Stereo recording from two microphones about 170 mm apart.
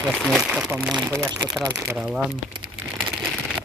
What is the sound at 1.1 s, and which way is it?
Speech, 15° right (ahead or behind).